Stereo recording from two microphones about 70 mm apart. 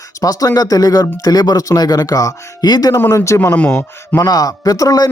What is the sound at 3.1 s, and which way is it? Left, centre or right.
Speech, left.